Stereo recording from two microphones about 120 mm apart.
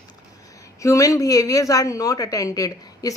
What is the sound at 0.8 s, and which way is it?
A woman's voice, 25° left (ahead or behind).